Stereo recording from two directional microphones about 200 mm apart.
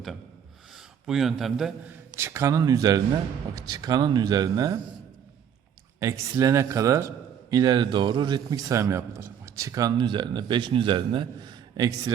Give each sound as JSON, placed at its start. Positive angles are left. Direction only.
{"t": 1.0, "sound": "speech", "side_deg": 0}
{"t": 2.1, "sound": "a man's voice", "side_deg": -15}
{"t": 6.0, "sound": "a man's voice", "side_deg": -15}